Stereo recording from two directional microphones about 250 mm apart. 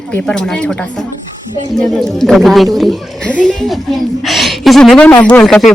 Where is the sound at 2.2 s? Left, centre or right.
Centre.